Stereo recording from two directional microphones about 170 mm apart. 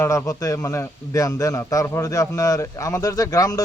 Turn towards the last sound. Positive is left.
turn(degrees=20)  # may be behind; listen again after turning